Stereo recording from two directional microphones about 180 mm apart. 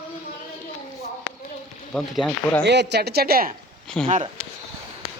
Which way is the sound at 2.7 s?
70° right (ahead or behind).